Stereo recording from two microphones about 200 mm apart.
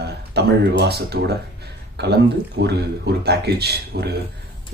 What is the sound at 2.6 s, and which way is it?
Speech, 60° right (ahead or behind).